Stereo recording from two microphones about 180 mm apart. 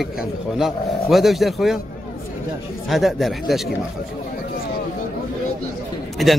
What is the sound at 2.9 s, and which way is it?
Speech, centre (ahead or behind).